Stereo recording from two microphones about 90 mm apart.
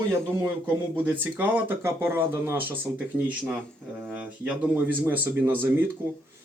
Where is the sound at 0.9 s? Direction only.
20° right (ahead or behind).